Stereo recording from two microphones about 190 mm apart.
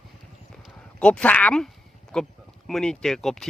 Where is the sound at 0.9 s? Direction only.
5° left (ahead or behind).